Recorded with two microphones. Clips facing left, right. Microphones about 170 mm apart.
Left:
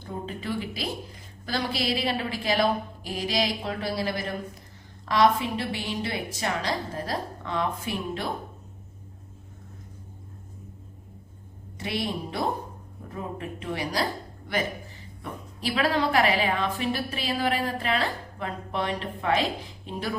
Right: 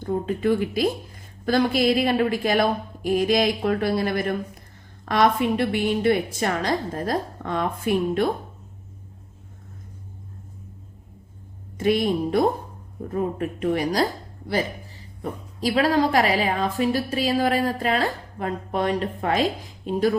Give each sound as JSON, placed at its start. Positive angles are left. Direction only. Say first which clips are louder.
{"t": 0.0, "sound": "a woman's voice", "louder": "right 11 dB", "side_deg": -50}
{"t": 11.8, "sound": "a woman's voice", "louder": "right 10 dB", "side_deg": -50}